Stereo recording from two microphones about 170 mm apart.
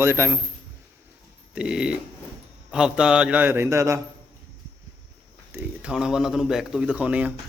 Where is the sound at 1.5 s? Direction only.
5° right (ahead or behind).